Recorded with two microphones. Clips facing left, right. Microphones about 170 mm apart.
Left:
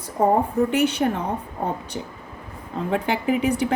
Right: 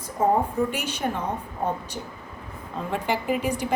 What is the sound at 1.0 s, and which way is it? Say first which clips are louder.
Speech: left 6 dB; 70° left (ahead or behind).